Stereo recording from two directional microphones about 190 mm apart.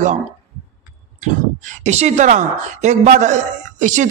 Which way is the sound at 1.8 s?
35° right (ahead or behind).